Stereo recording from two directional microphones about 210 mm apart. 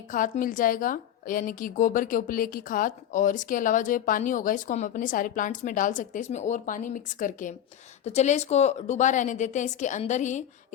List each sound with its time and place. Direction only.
0.1 s a woman's voice: 40° left (ahead or behind)